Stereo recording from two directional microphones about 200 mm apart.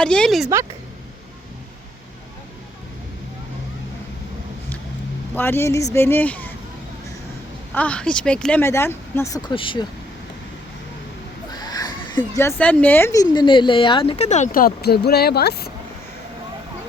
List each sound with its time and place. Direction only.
0.0 s speech: 5° left (ahead or behind)
5.3 s speech: 10° left (ahead or behind)
7.7 s speech: 5° left (ahead or behind); by 9.8 s 25° left (ahead or behind)
11.5 s speech: 20° left (ahead or behind); by 15.6 s 55° left (ahead or behind)